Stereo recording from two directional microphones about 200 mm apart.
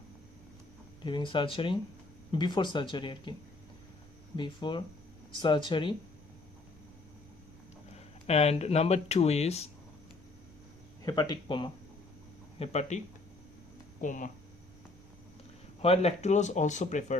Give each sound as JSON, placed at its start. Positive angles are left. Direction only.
{"t": 1.0, "sound": "speech", "side_deg": 25}
{"t": 4.4, "sound": "speech", "side_deg": 25}
{"t": 7.9, "sound": "speech", "side_deg": 30}
{"t": 11.0, "sound": "speech", "side_deg": 20}
{"t": 14.0, "sound": "speech", "side_deg": 40}
{"t": 15.8, "sound": "speech", "side_deg": 30}